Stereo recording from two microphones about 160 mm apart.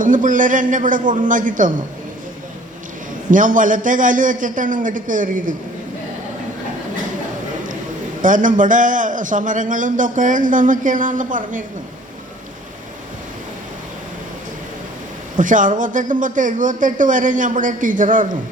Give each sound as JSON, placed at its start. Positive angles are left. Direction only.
{"t": 0.0, "sound": "a man's voice", "side_deg": -55}
{"t": 3.3, "sound": "a man's voice", "side_deg": -55}
{"t": 8.2, "sound": "a man's voice", "side_deg": -55}
{"t": 15.4, "sound": "a man's voice", "side_deg": -55}